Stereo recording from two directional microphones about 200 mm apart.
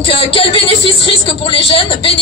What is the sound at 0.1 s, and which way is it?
A woman's voice, 25° left (ahead or behind).